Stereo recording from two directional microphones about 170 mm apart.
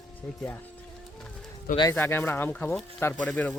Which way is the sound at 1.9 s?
15° left (ahead or behind).